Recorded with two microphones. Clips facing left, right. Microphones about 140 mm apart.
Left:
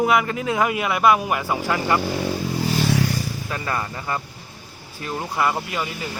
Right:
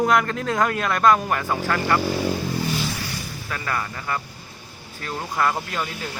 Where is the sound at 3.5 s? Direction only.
20° left (ahead or behind); by 6.0 s 5° left (ahead or behind).